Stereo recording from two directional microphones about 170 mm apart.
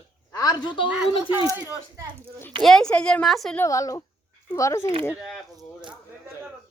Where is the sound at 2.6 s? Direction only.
Centre (ahead or behind).